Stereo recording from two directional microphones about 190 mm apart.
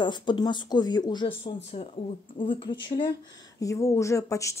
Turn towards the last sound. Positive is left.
turn(degrees=15)  # may be behind; listen again after turning